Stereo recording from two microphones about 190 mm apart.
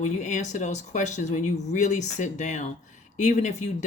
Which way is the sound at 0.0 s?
40° left (ahead or behind).